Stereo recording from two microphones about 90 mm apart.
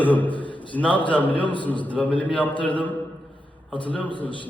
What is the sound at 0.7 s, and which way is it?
A man's voice, 15° left (ahead or behind).